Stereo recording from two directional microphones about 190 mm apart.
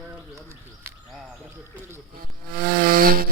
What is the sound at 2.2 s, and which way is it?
Wood, 50° right (ahead or behind).